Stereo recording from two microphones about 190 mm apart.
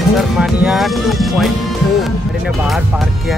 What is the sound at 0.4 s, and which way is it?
Speech, 5° right (ahead or behind).